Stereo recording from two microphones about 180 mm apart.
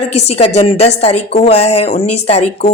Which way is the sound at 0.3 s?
35° left (ahead or behind).